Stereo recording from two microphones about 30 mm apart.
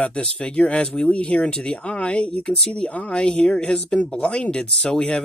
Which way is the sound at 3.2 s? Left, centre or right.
Left.